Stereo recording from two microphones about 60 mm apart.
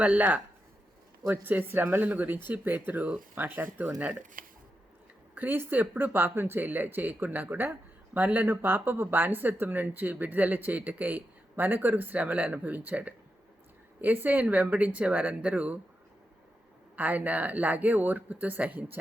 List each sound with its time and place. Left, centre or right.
0.2 s speech: right
1.3 s speech: right
5.3 s a woman's voice: right
16.9 s speech: right